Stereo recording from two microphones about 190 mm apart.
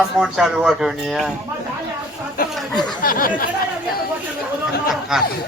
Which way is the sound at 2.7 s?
20° left (ahead or behind).